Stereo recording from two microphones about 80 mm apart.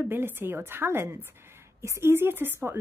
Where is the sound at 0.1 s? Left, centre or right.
Right.